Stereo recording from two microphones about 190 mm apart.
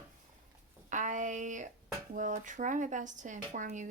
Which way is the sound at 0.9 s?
40° right (ahead or behind).